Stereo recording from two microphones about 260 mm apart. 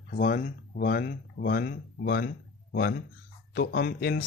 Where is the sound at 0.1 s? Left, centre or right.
Left.